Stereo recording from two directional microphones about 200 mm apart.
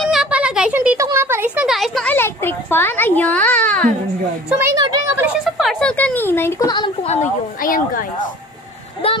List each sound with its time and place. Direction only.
0.0 s speech: centre (ahead or behind)
4.7 s a woman's voice: 20° right (ahead or behind)
5.2 s speech: centre (ahead or behind); by 7.2 s 25° left (ahead or behind)
7.2 s speech: 45° left (ahead or behind)
9.0 s speech: 30° left (ahead or behind)